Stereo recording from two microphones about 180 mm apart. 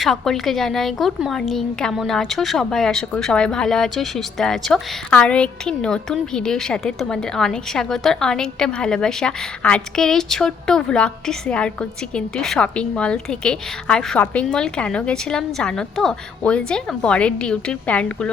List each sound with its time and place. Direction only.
0.0 s a woman's voice: centre (ahead or behind)